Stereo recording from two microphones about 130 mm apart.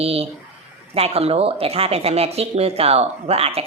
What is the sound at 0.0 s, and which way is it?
Speech, 50° right (ahead or behind).